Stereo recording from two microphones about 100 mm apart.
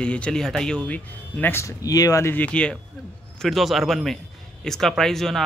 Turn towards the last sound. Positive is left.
turn(degrees=5)  # may be behind; listen again after turning